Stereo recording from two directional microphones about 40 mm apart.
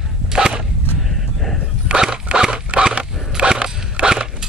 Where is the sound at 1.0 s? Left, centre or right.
Centre.